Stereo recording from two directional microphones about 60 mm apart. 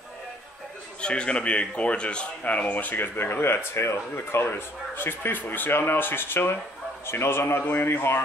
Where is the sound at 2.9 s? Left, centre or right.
Left.